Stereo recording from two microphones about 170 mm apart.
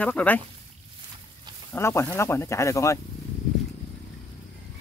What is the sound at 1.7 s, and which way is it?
Speech, 15° left (ahead or behind).